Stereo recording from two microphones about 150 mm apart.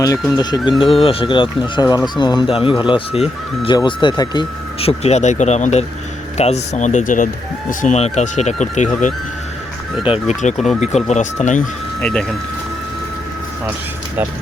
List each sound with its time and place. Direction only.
0.3 s speech: 25° left (ahead or behind)
0.8 s speech: 40° left (ahead or behind)
3.8 s speech: 30° left (ahead or behind); by 11.6 s 55° left (ahead or behind)
11.9 s speech: 5° left (ahead or behind)